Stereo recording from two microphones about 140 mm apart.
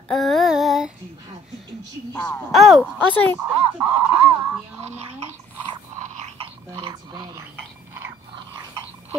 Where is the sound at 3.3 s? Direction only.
40° right (ahead or behind).